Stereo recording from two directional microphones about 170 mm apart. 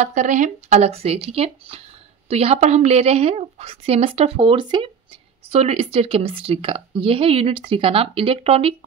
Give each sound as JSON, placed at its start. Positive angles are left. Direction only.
{"t": 0.0, "sound": "a woman's voice", "side_deg": -45}
{"t": 5.5, "sound": "a woman's voice", "side_deg": -40}